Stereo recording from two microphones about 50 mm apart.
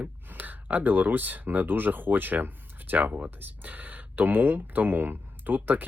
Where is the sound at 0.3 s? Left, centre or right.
Right.